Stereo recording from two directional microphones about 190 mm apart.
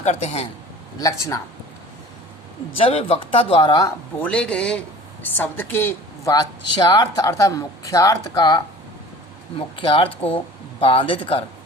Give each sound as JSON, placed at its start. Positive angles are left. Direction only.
{"t": 0.0, "sound": "a man's voice", "side_deg": 35}
{"t": 0.9, "sound": "speech", "side_deg": 15}
{"t": 2.7, "sound": "speech", "side_deg": 30}
{"t": 4.3, "sound": "a man's voice", "side_deg": 5}